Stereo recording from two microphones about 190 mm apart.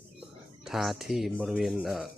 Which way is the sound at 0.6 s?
Centre (ahead or behind).